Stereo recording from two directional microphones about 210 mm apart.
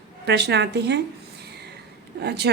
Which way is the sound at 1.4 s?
50° right (ahead or behind).